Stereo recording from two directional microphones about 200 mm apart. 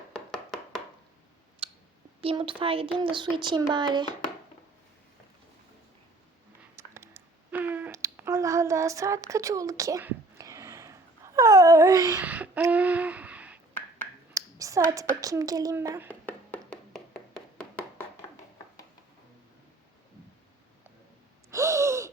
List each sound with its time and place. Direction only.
0.1 s chopping: 5° left (ahead or behind)
1.6 s clicking: 30° right (ahead or behind)
2.2 s speech: 25° right (ahead or behind)
6.7 s a sound: 15° right (ahead or behind)
11.3 s wail: 15° right (ahead or behind)
14.3 s a woman's voice: 15° right (ahead or behind)
16.0 s a sound: 10° left (ahead or behind)
21.5 s gasp: 15° right (ahead or behind)